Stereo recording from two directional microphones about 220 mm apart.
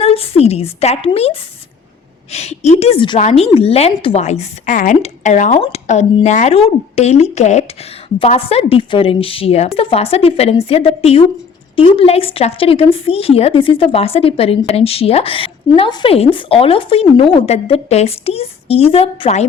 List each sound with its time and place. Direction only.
0.0 s speech: 25° left (ahead or behind)